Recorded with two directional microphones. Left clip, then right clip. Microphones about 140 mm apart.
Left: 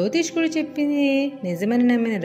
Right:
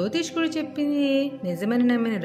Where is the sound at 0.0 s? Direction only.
10° left (ahead or behind).